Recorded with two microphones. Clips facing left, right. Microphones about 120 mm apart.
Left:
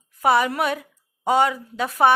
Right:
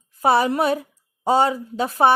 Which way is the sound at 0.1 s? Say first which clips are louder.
Right 1 dB; 30° right (ahead or behind).